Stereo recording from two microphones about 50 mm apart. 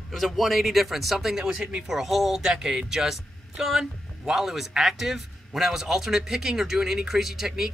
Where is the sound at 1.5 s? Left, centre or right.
Right.